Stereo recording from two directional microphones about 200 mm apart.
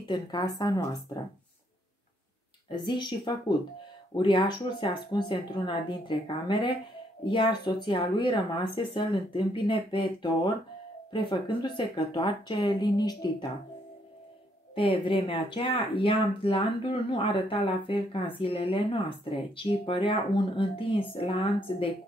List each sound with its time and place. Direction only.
0.1 s speech: 20° left (ahead or behind)
2.8 s speech: 25° left (ahead or behind)
14.8 s speech: 25° left (ahead or behind)